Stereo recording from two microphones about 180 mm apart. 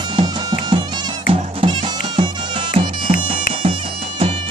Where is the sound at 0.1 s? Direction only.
25° right (ahead or behind).